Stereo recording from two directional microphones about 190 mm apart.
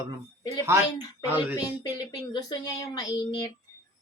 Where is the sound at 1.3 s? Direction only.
10° right (ahead or behind).